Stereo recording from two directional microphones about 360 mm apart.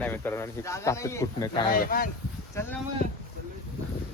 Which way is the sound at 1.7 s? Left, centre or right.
Left.